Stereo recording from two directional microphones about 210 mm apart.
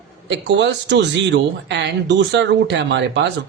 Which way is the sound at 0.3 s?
60° right (ahead or behind).